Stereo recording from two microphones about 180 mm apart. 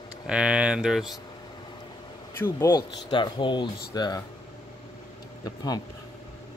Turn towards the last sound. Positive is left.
turn(degrees=20)  # may be behind; listen again after turning